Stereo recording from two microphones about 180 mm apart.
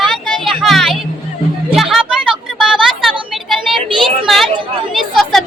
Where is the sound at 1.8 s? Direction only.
Centre (ahead or behind).